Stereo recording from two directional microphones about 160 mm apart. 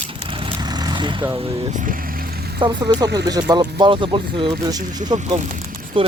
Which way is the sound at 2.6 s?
30° right (ahead or behind).